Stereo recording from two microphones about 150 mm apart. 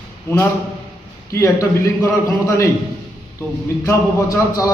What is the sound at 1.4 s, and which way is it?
A man's voice, 20° left (ahead or behind).